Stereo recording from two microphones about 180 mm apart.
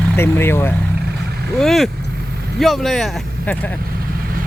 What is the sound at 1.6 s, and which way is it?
Speech, centre (ahead or behind).